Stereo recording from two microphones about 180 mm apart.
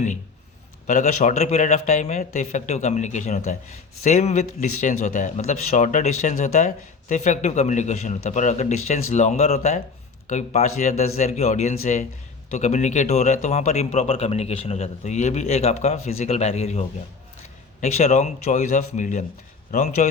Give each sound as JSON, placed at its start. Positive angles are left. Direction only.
{"t": 0.9, "sound": "a man's voice", "side_deg": 45}